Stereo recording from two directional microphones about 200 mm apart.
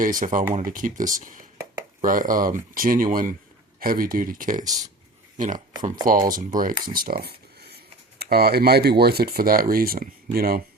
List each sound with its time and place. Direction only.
0.0 s speech: 40° right (ahead or behind)
6.1 s speech: 40° right (ahead or behind)